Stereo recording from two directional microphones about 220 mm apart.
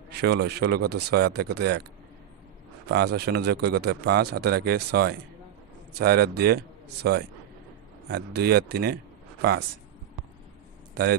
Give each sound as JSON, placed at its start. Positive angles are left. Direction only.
{"t": 0.1, "sound": "speech", "side_deg": -50}
{"t": 2.9, "sound": "speech", "side_deg": -50}